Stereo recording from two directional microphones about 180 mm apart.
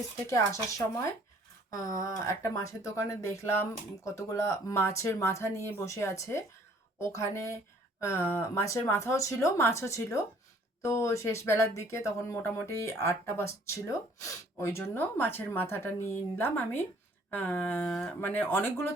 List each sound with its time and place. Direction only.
1.7 s speech: 20° left (ahead or behind)